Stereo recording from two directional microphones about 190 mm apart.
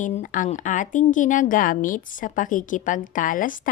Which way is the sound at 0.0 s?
40° left (ahead or behind).